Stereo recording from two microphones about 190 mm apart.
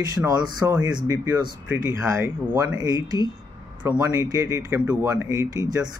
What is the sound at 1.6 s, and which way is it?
Speech, 10° right (ahead or behind).